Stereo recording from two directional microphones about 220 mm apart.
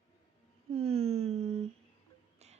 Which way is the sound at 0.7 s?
25° right (ahead or behind).